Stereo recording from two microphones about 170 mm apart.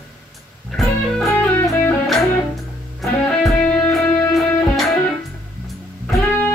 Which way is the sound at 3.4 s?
5° left (ahead or behind).